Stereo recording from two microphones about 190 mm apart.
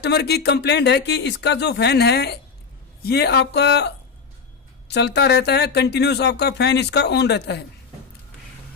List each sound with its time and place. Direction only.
0.0 s speech: 60° left (ahead or behind)